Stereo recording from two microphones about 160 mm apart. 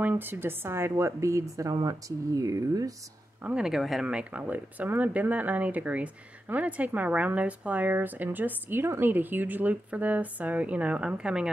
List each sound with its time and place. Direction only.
0.0 s a woman's voice: 15° right (ahead or behind)
3.4 s speech: 5° right (ahead or behind)